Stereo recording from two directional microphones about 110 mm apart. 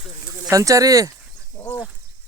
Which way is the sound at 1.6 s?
25° left (ahead or behind).